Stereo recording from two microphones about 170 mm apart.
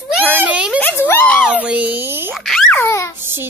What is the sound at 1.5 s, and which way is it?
Speech, 10° right (ahead or behind).